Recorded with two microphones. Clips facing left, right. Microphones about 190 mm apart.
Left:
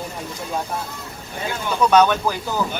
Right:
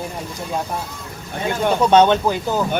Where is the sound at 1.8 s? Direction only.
25° right (ahead or behind).